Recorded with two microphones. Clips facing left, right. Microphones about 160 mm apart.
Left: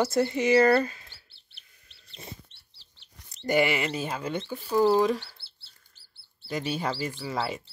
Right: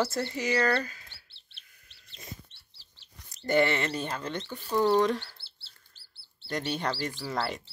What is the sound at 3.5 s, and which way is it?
Speech, 10° left (ahead or behind).